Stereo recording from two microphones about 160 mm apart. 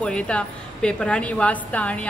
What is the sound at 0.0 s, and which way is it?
Speech, 5° left (ahead or behind).